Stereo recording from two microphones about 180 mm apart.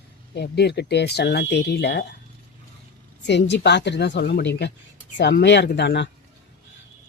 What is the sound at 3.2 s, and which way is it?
Speech, 75° left (ahead or behind).